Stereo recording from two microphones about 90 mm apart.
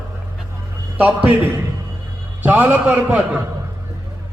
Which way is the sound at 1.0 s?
20° right (ahead or behind).